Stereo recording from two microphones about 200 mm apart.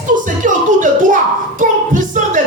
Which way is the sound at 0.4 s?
40° right (ahead or behind).